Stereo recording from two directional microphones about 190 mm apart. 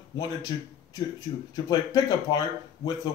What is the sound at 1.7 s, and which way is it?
Speech, 20° left (ahead or behind).